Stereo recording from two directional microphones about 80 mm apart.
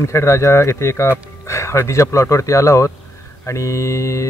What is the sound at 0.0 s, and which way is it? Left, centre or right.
A man's voice, left.